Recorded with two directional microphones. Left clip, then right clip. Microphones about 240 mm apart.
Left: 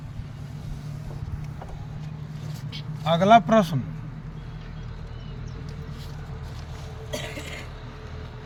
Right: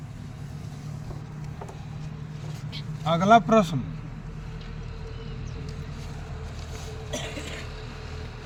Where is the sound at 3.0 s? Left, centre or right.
Left.